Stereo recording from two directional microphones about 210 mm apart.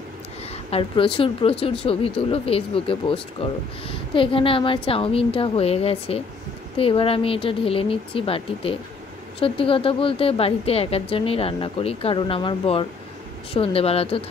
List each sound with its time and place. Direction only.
0.7 s a woman's voice: 25° left (ahead or behind)